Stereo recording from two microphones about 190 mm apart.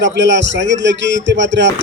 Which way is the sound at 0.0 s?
70° right (ahead or behind).